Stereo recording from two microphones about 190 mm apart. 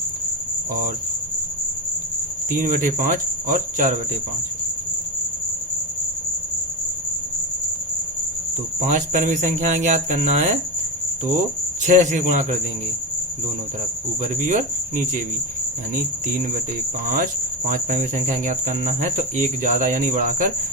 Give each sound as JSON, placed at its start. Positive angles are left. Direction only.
{"t": 2.5, "sound": "cricket", "side_deg": -45}
{"t": 8.9, "sound": "speech", "side_deg": -40}
{"t": 11.9, "sound": "speech", "side_deg": -40}
{"t": 14.2, "sound": "speech", "side_deg": -40}
{"t": 16.2, "sound": "cricket", "side_deg": -50}
{"t": 17.7, "sound": "speech", "side_deg": -40}